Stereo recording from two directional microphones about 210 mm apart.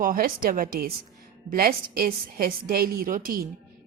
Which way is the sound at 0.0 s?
45° right (ahead or behind).